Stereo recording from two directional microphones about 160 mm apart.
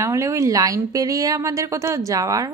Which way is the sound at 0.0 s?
20° right (ahead or behind).